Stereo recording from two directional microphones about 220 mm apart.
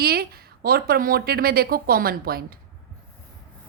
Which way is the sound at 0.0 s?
45° right (ahead or behind).